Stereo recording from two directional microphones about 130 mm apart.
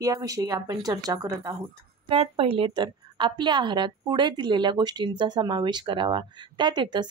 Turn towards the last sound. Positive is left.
turn(degrees=-35)  # may be behind; listen again after turning